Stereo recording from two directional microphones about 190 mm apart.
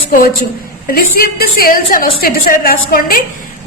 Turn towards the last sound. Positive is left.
turn(degrees=50)  # may be behind; listen again after turning